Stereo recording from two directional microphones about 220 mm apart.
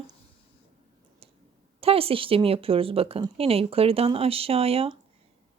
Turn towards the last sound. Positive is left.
turn(degrees=-25)  # may be behind; listen again after turning